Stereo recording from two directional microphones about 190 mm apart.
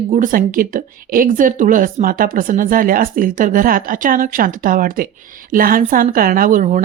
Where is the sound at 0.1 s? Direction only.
45° right (ahead or behind).